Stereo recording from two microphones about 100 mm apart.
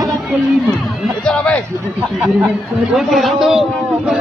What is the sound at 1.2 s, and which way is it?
Speech, 10° left (ahead or behind).